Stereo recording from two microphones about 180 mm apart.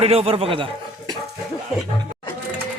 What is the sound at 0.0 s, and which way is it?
Speech, 35° right (ahead or behind).